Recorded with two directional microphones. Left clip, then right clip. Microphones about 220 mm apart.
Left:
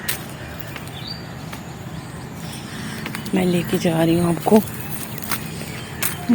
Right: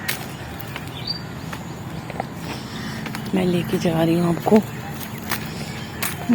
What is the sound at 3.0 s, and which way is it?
Speech, 15° left (ahead or behind).